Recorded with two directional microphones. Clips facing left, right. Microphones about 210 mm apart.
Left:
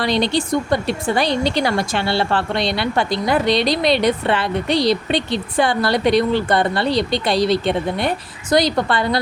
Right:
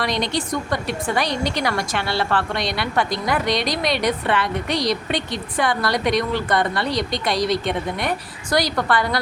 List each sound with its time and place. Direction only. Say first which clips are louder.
0.0 s speech: left 5 dB; 30° left (ahead or behind)